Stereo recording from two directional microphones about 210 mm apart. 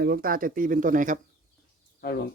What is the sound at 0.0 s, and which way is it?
Speech, 45° right (ahead or behind).